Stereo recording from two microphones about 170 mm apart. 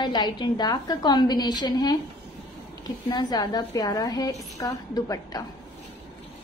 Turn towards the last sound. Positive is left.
turn(degrees=20)  # may be behind; listen again after turning